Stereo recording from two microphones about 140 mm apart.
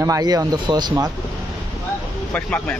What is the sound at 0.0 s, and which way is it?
Speech, 25° right (ahead or behind).